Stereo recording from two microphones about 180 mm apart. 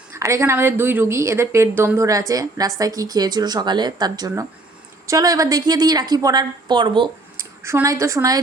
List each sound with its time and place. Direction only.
0.1 s a woman's voice: 15° right (ahead or behind)
7.3 s a woman's voice: 15° right (ahead or behind)